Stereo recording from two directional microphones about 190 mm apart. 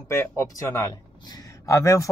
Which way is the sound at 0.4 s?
15° left (ahead or behind).